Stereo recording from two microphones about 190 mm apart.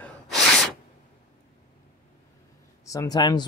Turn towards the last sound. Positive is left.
turn(degrees=20)  # may be behind; listen again after turning